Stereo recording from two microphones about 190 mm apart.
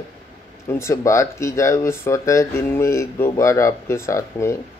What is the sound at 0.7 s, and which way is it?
Speech, 15° left (ahead or behind).